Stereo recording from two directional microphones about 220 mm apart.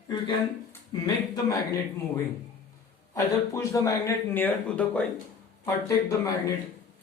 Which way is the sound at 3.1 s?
15° left (ahead or behind).